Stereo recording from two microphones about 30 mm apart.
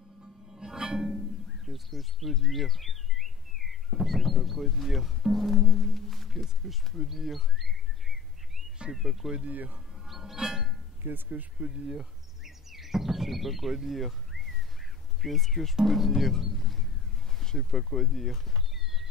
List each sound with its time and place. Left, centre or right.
0.6 s music: right
1.7 s speech: centre
8.9 s speech: centre
10.0 s wind chime: centre
11.1 s speech: right
11.6 s speech: right
12.4 s speech: centre